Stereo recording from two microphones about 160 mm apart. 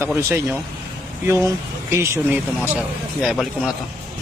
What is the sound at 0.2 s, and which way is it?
Speech, 15° right (ahead or behind).